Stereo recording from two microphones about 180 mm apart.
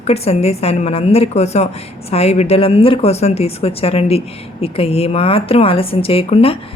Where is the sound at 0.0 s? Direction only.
35° left (ahead or behind).